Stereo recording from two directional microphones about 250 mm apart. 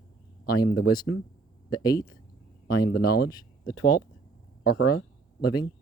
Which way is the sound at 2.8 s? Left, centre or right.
Left.